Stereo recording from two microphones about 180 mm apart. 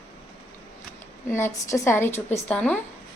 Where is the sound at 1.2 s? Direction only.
15° left (ahead or behind).